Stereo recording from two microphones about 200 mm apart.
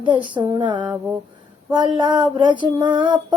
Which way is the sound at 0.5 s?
20° right (ahead or behind).